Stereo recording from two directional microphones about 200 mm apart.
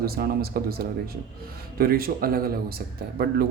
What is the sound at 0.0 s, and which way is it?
Speech, 50° right (ahead or behind).